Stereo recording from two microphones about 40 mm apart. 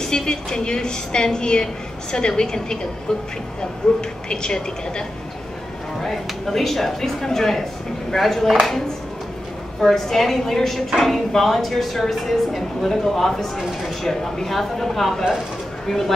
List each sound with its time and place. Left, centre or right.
0.0 s a woman's voice: centre
6.0 s a woman's voice: centre
9.8 s a woman's voice: centre
13.6 s a woman's voice: centre
14.0 s a woman's voice: centre